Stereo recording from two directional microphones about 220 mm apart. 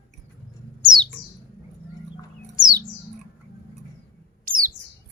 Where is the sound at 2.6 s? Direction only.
20° right (ahead or behind).